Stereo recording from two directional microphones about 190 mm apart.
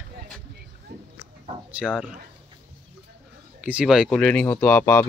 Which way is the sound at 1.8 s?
Centre (ahead or behind).